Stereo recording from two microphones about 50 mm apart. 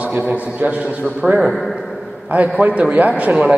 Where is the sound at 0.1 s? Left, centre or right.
Right.